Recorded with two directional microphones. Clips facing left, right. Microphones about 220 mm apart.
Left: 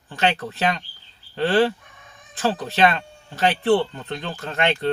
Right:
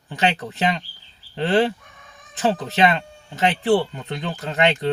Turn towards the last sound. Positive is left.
turn(degrees=-15)  # may be behind; listen again after turning